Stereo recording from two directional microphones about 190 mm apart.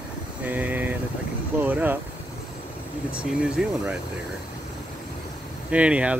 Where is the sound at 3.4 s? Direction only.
5° right (ahead or behind).